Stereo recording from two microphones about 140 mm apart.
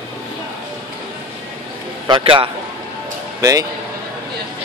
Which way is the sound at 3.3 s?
25° right (ahead or behind).